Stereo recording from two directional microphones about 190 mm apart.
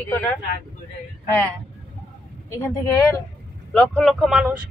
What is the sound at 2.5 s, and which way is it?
Speech, 15° left (ahead or behind).